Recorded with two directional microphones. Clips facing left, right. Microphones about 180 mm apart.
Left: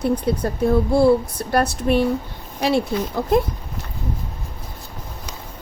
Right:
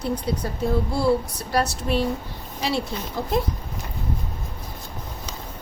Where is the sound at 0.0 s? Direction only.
55° left (ahead or behind).